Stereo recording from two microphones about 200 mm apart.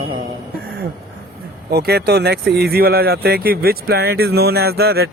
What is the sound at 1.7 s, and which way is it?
Speech, 55° right (ahead or behind).